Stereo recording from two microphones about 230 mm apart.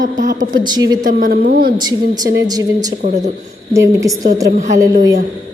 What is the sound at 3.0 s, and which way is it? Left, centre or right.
Speech, right.